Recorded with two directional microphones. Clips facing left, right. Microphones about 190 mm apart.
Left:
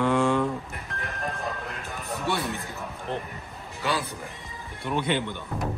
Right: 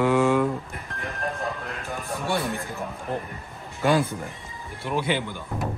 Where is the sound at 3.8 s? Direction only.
50° right (ahead or behind).